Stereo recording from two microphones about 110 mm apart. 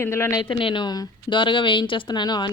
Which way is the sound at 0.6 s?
45° left (ahead or behind).